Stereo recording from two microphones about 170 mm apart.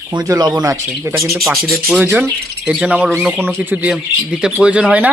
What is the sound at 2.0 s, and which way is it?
Speech, 15° right (ahead or behind).